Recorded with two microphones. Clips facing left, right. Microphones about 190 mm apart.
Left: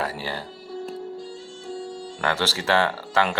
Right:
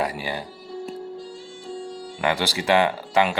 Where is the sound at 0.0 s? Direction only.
15° right (ahead or behind).